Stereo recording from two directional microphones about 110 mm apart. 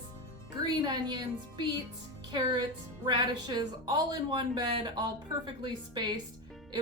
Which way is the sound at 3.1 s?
40° right (ahead or behind).